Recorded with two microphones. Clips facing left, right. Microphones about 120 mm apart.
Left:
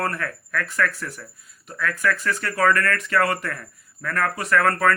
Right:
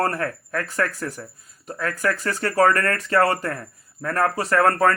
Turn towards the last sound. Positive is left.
turn(degrees=-30)  # may be behind; listen again after turning